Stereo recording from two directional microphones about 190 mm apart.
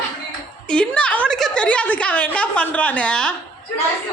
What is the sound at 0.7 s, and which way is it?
A woman's voice, 5° left (ahead or behind).